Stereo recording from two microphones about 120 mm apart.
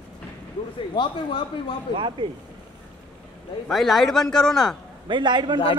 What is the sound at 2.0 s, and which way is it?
Speech, 45° right (ahead or behind).